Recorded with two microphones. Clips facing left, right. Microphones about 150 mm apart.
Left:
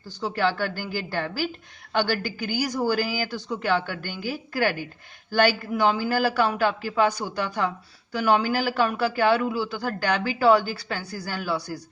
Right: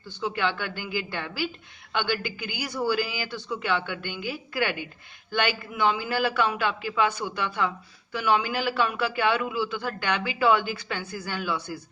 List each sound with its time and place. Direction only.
0.1 s a man's voice: 35° left (ahead or behind)